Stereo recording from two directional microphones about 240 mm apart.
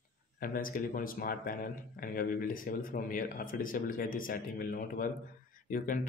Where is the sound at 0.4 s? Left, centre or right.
Left.